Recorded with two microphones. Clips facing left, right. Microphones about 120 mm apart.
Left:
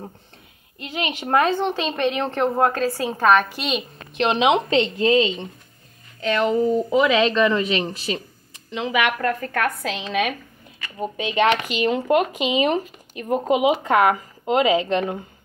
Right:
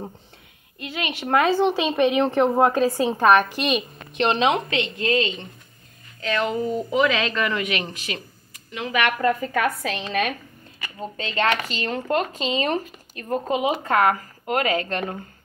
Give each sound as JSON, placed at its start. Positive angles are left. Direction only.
{"t": 0.8, "sound": "speech", "side_deg": 15}
{"t": 1.2, "sound": "a woman's voice", "side_deg": -5}
{"t": 4.2, "sound": "a woman's voice", "side_deg": 5}
{"t": 4.6, "sound": "a woman's voice", "side_deg": 30}
{"t": 9.2, "sound": "a woman's voice", "side_deg": -5}
{"t": 11.0, "sound": "speech", "side_deg": 15}